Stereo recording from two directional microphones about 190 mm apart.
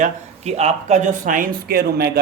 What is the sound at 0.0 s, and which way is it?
Speech, 35° right (ahead or behind).